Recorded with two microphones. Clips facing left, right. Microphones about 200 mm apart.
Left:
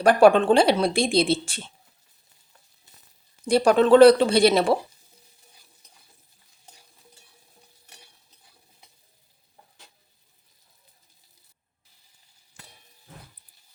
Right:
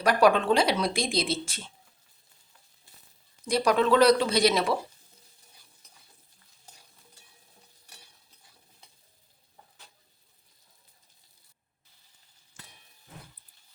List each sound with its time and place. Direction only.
0.0 s speech: 30° left (ahead or behind)
3.4 s speech: 30° left (ahead or behind)